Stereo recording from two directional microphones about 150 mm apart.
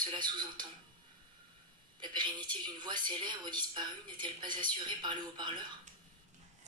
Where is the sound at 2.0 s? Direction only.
30° right (ahead or behind).